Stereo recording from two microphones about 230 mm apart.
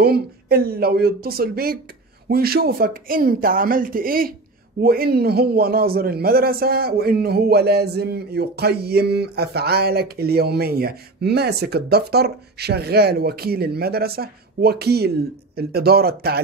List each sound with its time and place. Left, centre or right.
0.0 s a man's voice: right